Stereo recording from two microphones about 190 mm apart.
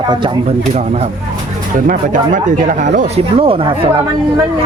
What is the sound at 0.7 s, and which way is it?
Speech, 35° right (ahead or behind).